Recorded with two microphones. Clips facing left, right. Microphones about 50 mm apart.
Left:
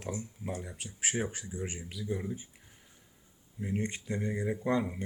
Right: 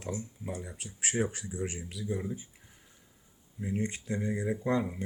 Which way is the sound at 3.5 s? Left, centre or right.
Centre.